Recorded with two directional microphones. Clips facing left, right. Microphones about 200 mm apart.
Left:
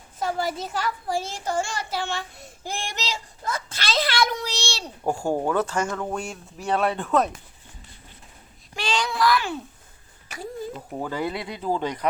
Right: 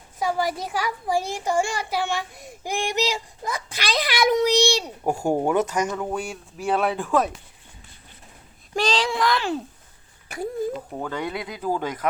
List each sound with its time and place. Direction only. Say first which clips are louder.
0.2 s a child's voice: right 2 dB; 15° right (ahead or behind)
8.7 s a child's voice: right 4 dB; 40° right (ahead or behind)
10.2 s a sound: right 6 dB; 55° right (ahead or behind)
10.9 s speech: left 1 dB; 5° left (ahead or behind)